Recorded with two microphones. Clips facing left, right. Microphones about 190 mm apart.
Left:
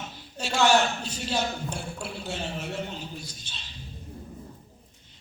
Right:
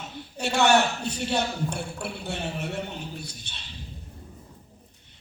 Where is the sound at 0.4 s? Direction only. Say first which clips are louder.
Right 1 dB; 60° right (ahead or behind).